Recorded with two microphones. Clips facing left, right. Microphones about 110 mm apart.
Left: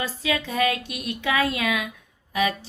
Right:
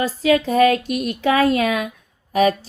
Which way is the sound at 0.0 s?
40° right (ahead or behind).